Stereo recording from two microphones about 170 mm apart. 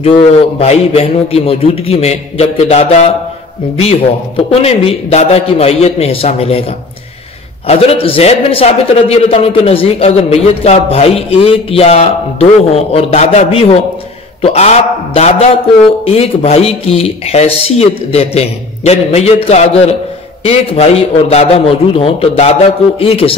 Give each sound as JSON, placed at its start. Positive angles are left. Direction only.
{"t": 0.0, "sound": "a man's voice", "side_deg": 35}
{"t": 4.5, "sound": "a man's voice", "side_deg": 35}
{"t": 7.6, "sound": "a man's voice", "side_deg": 35}